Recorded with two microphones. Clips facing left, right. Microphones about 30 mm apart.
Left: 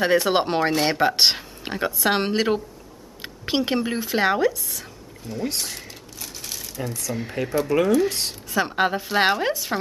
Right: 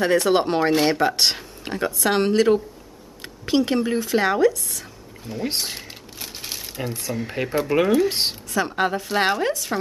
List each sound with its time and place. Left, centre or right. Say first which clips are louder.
0.0 s speech: right 1 dB; centre
5.3 s speech: even; centre
5.7 s coin: right 2 dB; right
7.2 s speech: even; right
8.5 s speech: left 1 dB; centre